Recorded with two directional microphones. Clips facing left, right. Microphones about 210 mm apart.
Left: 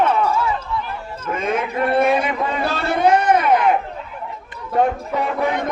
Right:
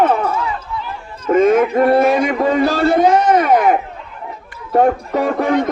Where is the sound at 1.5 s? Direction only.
50° right (ahead or behind).